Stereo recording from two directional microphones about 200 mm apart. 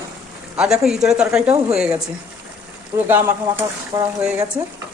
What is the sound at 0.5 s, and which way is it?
Speech, 5° right (ahead or behind).